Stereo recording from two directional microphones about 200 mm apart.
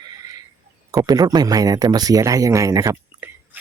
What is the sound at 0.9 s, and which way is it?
Speech, 20° right (ahead or behind).